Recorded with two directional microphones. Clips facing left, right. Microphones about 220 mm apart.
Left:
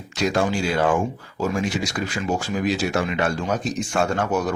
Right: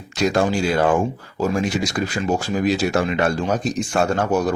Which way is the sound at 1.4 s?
40° right (ahead or behind).